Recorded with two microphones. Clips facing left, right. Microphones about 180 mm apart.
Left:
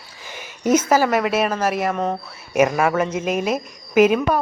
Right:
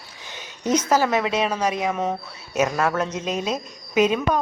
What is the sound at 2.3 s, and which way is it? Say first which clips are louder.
Speech: left 8 dB; 10° left (ahead or behind).